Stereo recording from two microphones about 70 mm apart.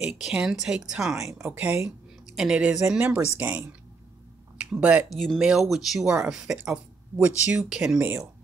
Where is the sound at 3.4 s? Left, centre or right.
Right.